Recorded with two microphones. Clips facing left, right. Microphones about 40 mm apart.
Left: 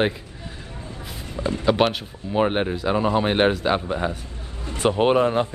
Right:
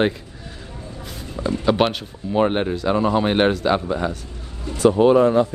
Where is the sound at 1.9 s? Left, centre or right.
Centre.